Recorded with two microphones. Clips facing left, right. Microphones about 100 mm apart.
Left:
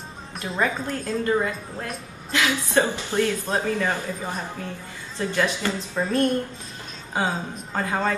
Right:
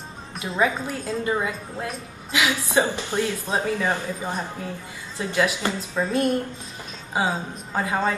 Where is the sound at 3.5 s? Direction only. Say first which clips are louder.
Even; 5° right (ahead or behind).